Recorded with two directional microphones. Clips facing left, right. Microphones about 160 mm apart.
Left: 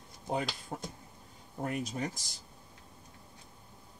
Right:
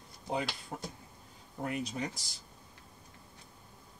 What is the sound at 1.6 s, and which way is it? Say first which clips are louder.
Speech: left 1 dB; 45° left (ahead or behind).